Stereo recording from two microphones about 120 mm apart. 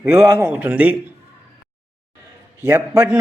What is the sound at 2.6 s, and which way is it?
Speech, 25° right (ahead or behind).